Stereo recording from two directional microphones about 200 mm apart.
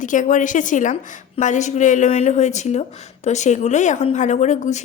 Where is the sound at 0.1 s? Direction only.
40° left (ahead or behind).